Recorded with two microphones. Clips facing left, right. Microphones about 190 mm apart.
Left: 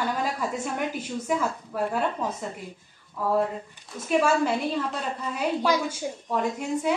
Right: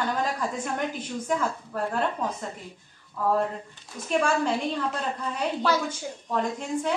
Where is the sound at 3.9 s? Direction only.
5° left (ahead or behind).